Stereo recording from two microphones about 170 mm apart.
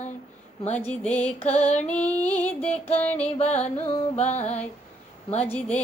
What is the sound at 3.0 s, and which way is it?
Music, 10° left (ahead or behind).